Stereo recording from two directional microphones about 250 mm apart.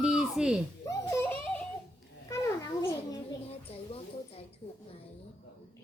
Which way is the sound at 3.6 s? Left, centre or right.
Left.